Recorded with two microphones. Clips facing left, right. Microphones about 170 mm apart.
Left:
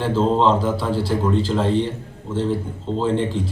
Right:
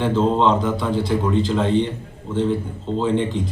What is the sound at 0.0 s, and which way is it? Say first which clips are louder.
A man's voice: even; 5° left (ahead or behind).